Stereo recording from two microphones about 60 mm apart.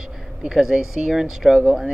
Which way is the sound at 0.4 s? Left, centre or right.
Centre.